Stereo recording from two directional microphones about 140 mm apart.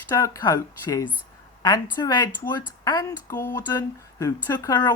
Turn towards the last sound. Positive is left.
turn(degrees=30)  # may be behind; listen again after turning